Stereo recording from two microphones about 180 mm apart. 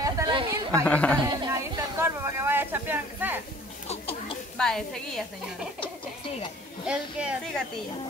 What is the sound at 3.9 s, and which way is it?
Chatter, 30° left (ahead or behind).